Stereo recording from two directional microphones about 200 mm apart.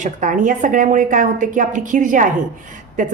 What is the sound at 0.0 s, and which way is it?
A woman's voice, 40° right (ahead or behind).